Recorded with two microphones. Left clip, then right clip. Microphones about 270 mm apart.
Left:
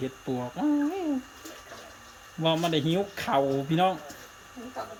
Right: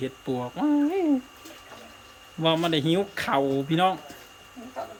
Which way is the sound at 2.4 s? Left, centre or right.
Centre.